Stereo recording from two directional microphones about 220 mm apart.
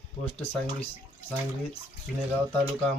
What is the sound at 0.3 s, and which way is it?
Speech, 5° left (ahead or behind).